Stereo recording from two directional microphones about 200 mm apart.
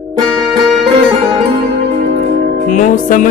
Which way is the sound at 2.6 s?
40° left (ahead or behind).